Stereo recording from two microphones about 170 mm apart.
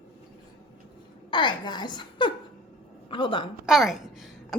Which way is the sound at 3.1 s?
30° left (ahead or behind).